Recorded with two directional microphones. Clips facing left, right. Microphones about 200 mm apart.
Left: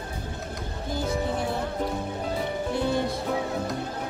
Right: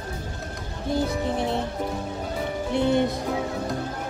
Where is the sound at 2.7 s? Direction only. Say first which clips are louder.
Right 6 dB; 20° right (ahead or behind).